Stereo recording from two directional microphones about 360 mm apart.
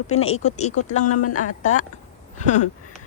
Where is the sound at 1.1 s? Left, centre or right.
Left.